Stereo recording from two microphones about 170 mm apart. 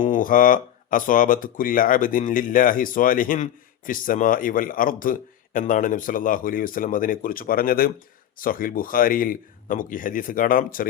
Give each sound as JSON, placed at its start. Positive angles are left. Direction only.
{"t": 0.0, "sound": "speech", "side_deg": 50}